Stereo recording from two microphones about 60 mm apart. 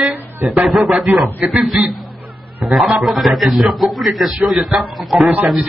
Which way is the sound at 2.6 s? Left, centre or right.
Centre.